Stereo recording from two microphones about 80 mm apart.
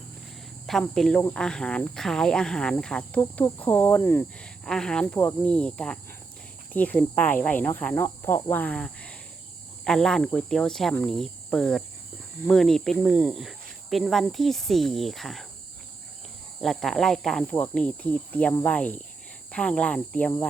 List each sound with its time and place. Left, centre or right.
0.7 s speech: centre; by 4.3 s left
4.4 s speech: centre
13.1 s speech: centre
16.6 s speech: centre